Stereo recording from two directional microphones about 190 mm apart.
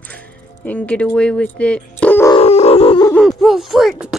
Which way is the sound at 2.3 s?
30° left (ahead or behind).